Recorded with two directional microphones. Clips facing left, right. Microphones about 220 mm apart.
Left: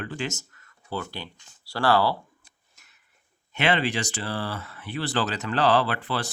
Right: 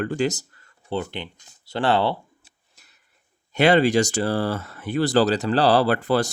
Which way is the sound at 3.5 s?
40° right (ahead or behind).